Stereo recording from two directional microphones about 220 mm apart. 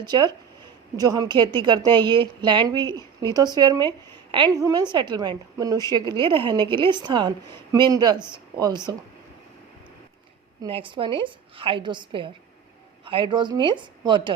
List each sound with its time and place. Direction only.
0.0 s a woman's voice: 20° right (ahead or behind)
10.6 s a woman's voice: 25° right (ahead or behind)